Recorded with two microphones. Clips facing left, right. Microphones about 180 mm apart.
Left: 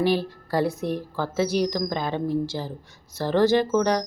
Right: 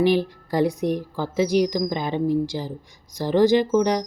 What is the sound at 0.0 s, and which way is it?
Speech, 15° right (ahead or behind).